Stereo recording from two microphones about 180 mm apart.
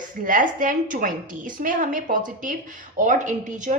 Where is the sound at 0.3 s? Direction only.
50° right (ahead or behind).